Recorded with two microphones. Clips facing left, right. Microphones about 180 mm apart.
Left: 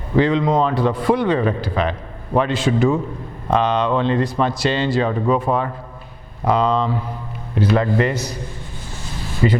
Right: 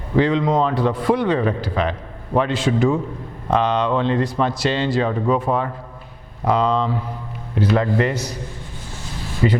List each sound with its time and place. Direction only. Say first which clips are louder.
0.2 s a man's voice: left 1 dB; 15° left (ahead or behind)
9.4 s a man's voice: left 1 dB; 20° left (ahead or behind)